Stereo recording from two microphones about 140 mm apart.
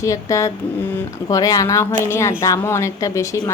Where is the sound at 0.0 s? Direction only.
20° left (ahead or behind).